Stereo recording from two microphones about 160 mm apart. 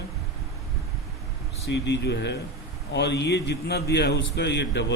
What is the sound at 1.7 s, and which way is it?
Speech, 90° left.